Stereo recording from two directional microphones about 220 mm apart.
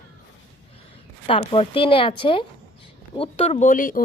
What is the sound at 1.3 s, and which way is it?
A woman's voice, 25° left (ahead or behind).